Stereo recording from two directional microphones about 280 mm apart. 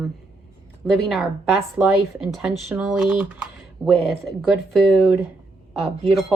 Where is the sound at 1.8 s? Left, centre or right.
Centre.